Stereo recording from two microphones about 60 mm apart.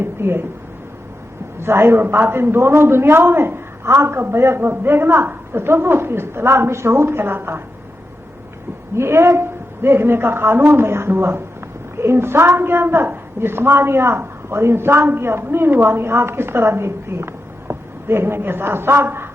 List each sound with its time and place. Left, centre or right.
0.0 s speech: right
1.6 s a woman's voice: right
9.0 s a woman's voice: right